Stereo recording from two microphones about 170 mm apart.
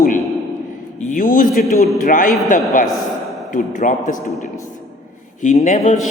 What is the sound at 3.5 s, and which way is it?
Speech, 50° left (ahead or behind).